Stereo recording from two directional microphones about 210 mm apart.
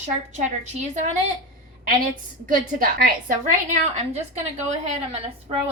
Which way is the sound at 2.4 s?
40° right (ahead or behind).